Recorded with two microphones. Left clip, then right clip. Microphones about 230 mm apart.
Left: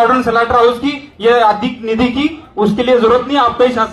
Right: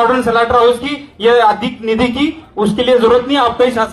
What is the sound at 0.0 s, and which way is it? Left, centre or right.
A man's voice, centre.